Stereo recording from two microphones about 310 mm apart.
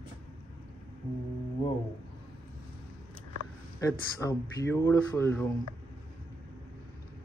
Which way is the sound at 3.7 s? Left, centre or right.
Centre.